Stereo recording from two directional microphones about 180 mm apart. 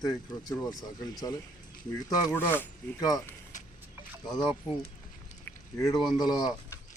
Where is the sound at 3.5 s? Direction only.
45° left (ahead or behind).